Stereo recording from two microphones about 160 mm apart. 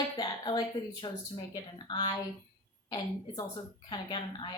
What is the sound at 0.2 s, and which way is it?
A woman's voice, 25° left (ahead or behind).